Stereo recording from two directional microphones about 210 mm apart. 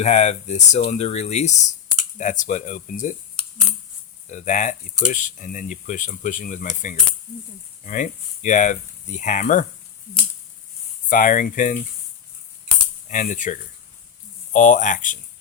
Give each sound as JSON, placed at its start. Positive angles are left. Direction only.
{"t": 0.0, "sound": "speech", "side_deg": 30}
{"t": 4.3, "sound": "speech", "side_deg": 35}
{"t": 11.1, "sound": "speech", "side_deg": 40}
{"t": 13.1, "sound": "speech", "side_deg": 35}